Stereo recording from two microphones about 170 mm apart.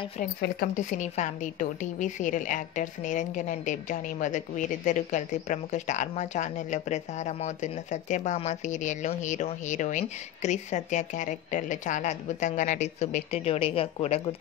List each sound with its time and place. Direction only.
0.7 s a woman's voice: 45° left (ahead or behind)